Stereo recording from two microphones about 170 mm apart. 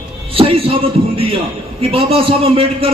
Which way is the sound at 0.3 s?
35° right (ahead or behind).